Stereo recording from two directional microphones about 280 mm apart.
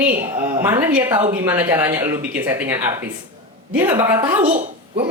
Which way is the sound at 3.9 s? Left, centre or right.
Centre.